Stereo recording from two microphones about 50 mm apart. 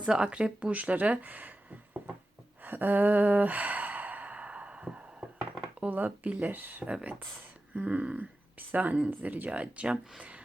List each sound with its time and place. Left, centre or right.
0.0 s speech: right
2.6 s sigh: right
5.8 s speech: right
6.9 s speech: right